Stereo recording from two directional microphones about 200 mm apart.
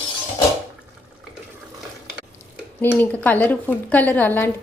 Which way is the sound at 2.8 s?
10° left (ahead or behind).